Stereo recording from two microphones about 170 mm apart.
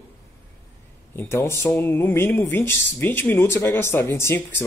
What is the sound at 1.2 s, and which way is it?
Speech, 15° left (ahead or behind).